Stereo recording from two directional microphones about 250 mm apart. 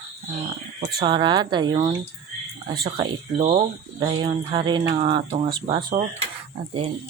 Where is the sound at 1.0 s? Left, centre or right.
Centre.